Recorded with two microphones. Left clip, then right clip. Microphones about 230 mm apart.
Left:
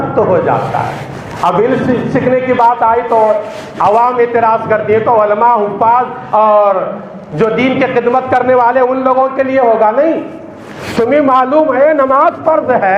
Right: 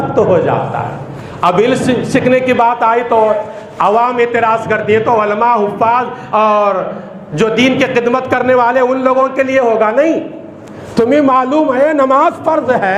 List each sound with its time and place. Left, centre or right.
0.2 s a man's voice: right